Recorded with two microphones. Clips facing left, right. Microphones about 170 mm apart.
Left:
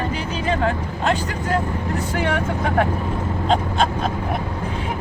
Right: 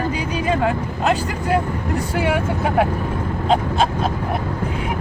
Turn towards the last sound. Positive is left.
turn(degrees=-5)  # may be behind; listen again after turning